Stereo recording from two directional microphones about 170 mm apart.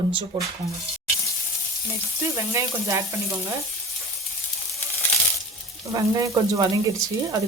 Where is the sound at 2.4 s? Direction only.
15° right (ahead or behind).